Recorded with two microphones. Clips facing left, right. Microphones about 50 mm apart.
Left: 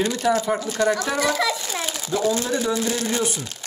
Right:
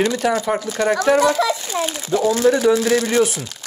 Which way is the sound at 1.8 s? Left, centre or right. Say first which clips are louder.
Right 4 dB; right.